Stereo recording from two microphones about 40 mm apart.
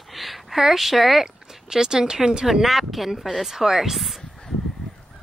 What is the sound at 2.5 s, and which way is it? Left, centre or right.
Speech, centre.